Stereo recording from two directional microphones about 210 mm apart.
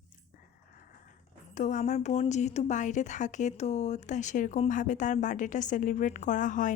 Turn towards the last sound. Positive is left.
turn(degrees=35)  # may be behind; listen again after turning